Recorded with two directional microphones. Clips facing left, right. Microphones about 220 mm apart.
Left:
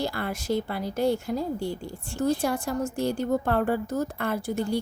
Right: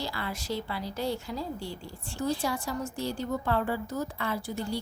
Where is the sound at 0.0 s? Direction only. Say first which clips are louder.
Left 6 dB; 50° left (ahead or behind).